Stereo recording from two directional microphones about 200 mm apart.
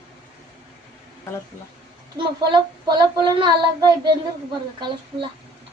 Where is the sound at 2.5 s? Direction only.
20° right (ahead or behind).